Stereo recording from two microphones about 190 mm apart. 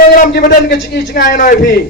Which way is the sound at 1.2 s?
45° left (ahead or behind).